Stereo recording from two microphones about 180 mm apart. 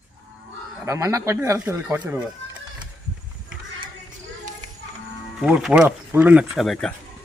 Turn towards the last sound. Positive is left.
turn(degrees=0)  # may be behind; listen again after turning